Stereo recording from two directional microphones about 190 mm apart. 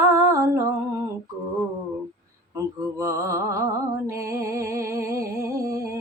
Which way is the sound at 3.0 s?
15° right (ahead or behind).